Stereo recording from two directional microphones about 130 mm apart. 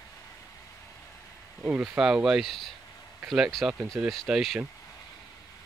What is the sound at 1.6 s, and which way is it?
Speech, 10° right (ahead or behind).